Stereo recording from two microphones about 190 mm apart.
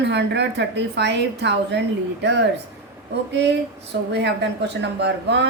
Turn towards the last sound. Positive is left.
turn(degrees=-65)  # may be behind; listen again after turning